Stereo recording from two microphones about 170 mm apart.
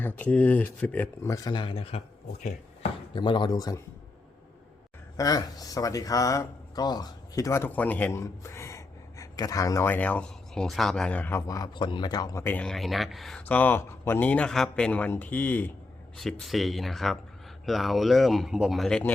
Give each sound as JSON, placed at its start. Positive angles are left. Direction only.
{"t": 0.2, "sound": "speech", "side_deg": 10}
{"t": 5.1, "sound": "speech", "side_deg": 20}
{"t": 16.1, "sound": "speech", "side_deg": 0}